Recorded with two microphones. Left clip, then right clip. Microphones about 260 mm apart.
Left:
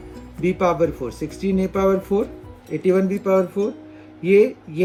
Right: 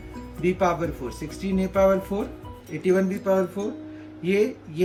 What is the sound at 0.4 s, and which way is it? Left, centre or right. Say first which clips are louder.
Speech: left 4 dB; centre.